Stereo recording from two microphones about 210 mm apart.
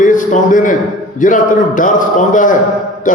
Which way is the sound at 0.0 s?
40° left (ahead or behind).